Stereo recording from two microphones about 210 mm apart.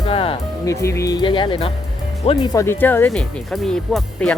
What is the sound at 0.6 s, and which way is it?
Speech, 15° left (ahead or behind).